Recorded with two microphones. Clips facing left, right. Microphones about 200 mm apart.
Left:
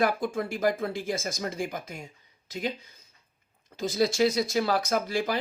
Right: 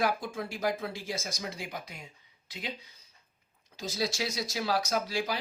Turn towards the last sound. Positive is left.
turn(degrees=50)  # may be behind; listen again after turning